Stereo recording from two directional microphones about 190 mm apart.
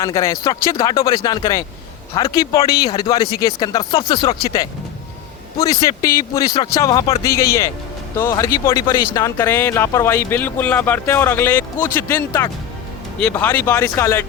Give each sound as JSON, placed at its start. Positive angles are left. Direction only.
{"t": 0.0, "sound": "speech", "side_deg": 15}
{"t": 5.5, "sound": "speech", "side_deg": 15}